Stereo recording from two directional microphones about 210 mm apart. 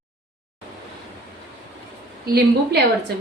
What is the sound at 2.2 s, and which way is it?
Speech, 50° right (ahead or behind).